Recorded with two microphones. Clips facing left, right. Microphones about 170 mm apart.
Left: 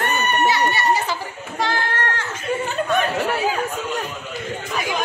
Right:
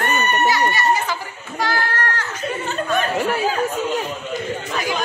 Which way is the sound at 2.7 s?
15° left (ahead or behind).